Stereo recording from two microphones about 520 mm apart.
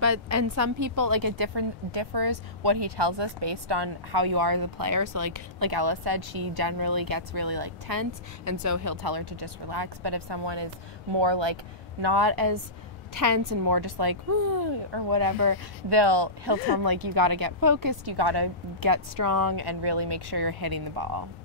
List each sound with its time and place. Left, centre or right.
0.0 s a woman's voice: right
1.4 s a woman's voice: right